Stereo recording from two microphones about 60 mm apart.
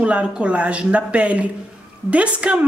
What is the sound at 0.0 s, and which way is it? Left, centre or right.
A woman's voice, right.